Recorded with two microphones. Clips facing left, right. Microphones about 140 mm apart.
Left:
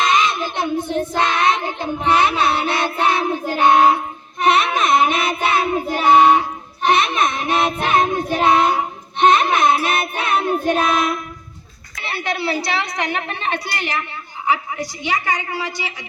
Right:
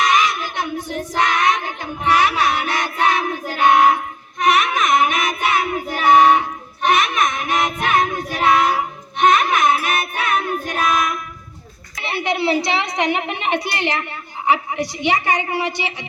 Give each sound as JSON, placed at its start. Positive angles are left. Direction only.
{"t": 0.0, "sound": "child singing", "side_deg": 25}
{"t": 11.9, "sound": "a woman's voice", "side_deg": -20}